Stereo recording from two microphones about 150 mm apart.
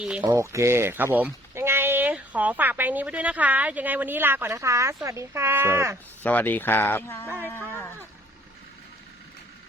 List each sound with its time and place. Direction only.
0.0 s speech: 5° right (ahead or behind)
0.3 s speech: 20° right (ahead or behind)
6.2 s speech: 10° left (ahead or behind)
7.4 s a sound: 15° left (ahead or behind)